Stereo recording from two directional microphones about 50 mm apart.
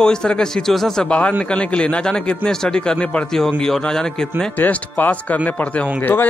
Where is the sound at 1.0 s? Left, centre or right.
Left.